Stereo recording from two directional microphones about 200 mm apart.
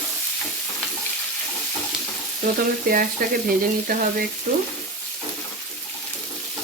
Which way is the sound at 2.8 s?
45° right (ahead or behind).